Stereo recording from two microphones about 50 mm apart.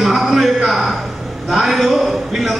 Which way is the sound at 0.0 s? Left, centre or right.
Centre.